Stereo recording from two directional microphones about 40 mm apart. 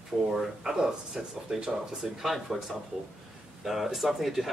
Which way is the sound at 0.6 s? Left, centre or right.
Centre.